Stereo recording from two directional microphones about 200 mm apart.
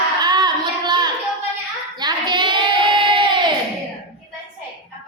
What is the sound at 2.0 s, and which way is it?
Child singing, 20° right (ahead or behind).